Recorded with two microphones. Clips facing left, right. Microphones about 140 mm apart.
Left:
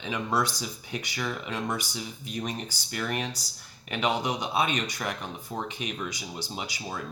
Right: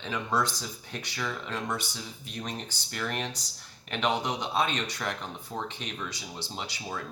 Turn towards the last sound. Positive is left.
turn(degrees=10)  # may be behind; listen again after turning